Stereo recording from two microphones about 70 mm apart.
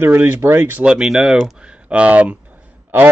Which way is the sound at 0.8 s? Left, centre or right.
Centre.